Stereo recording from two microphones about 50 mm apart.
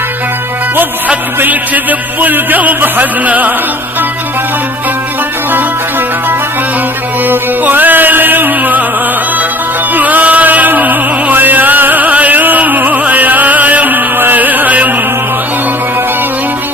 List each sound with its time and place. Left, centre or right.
0.8 s music: right
7.3 s music: right
9.9 s music: right